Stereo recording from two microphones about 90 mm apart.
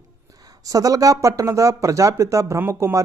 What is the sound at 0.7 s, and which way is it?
Speech, 40° right (ahead or behind).